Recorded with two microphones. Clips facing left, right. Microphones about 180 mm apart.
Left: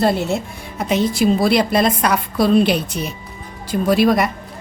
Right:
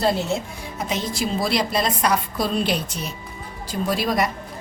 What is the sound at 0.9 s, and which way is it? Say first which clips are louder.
A woman's voice: left 10 dB; 60° left (ahead or behind).